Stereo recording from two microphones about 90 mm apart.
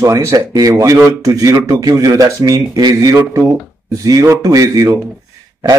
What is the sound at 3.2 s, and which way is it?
Speech, 25° right (ahead or behind).